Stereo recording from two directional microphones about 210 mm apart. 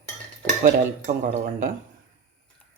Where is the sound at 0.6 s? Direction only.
35° right (ahead or behind).